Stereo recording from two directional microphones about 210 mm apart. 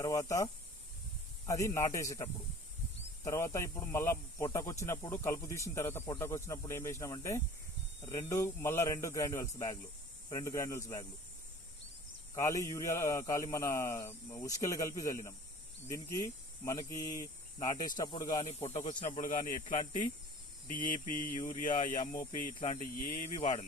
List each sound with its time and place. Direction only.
0.0 s speech: 15° left (ahead or behind)
12.3 s speech: 15° left (ahead or behind); by 19.5 s 40° left (ahead or behind)
19.6 s speech: 25° left (ahead or behind)
20.7 s speech: 40° left (ahead or behind)